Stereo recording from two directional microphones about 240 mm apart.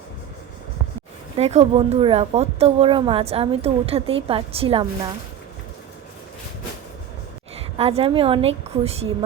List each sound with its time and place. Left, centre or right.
1.4 s speech: right
7.8 s speech: right